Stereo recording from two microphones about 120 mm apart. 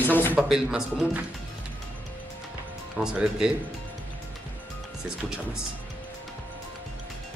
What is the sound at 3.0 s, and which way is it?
Speech, 5° right (ahead or behind).